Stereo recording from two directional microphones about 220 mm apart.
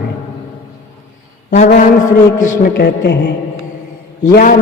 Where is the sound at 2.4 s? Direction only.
45° left (ahead or behind).